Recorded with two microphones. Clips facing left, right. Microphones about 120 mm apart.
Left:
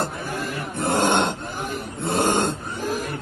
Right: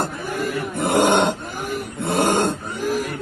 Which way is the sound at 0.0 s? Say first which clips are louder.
Right 3 dB; 55° right (ahead or behind).